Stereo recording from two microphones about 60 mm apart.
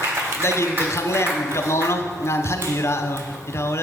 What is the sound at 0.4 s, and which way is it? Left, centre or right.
Speech, left.